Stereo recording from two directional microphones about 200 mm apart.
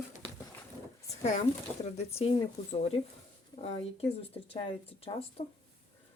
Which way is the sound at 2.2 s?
30° left (ahead or behind).